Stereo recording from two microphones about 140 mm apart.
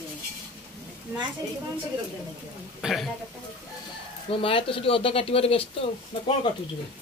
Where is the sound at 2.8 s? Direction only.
Centre (ahead or behind).